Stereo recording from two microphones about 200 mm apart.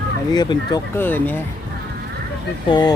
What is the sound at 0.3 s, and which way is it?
Speech, 20° left (ahead or behind).